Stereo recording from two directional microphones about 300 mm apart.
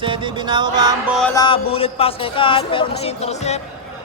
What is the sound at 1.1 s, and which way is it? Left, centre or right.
A man's voice, centre.